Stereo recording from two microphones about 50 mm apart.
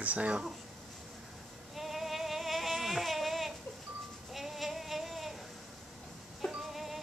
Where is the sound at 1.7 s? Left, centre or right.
Centre.